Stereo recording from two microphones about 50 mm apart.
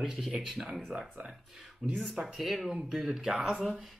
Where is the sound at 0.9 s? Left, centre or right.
Right.